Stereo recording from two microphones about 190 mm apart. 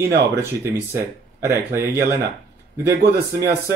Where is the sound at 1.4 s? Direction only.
15° right (ahead or behind).